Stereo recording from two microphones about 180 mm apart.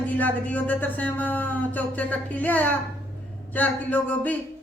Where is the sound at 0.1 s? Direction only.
10° left (ahead or behind).